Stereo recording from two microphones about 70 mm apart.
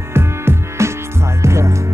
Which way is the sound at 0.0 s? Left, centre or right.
Right.